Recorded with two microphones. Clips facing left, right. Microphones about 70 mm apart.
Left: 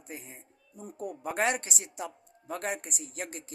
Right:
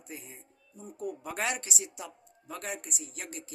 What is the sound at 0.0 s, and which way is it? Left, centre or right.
Speech, left.